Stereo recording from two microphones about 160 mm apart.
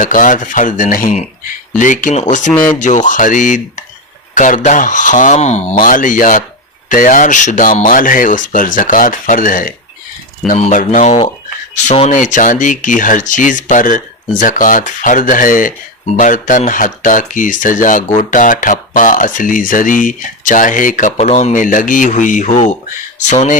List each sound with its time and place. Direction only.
0.0 s speech: 55° left (ahead or behind)